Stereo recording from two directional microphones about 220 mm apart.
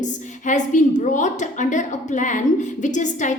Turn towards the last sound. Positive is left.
turn(degrees=35)  # may be behind; listen again after turning